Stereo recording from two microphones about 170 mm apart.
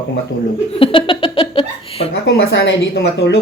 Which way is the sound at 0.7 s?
30° left (ahead or behind).